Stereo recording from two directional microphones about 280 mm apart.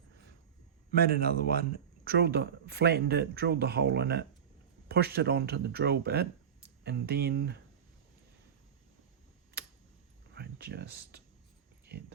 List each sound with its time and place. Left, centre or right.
0.9 s speech: right
10.3 s speech: right
11.9 s a sound: right